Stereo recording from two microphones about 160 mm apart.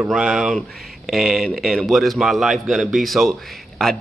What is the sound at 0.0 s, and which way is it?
Speech, 5° right (ahead or behind).